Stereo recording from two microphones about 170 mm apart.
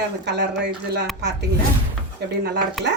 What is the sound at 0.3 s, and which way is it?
Speech, 90° right.